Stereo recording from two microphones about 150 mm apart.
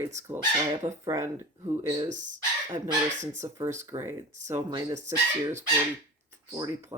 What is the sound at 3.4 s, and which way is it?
Speech, 20° right (ahead or behind).